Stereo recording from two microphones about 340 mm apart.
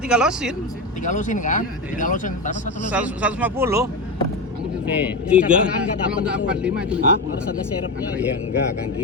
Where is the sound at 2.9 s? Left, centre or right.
Centre.